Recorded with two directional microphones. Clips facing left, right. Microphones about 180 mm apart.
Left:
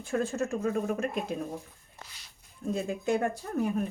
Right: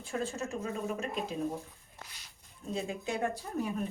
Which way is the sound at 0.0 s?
50° left (ahead or behind).